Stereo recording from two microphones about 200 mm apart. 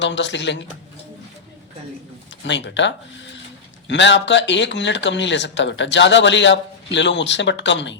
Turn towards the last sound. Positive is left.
turn(degrees=65)  # may be behind; listen again after turning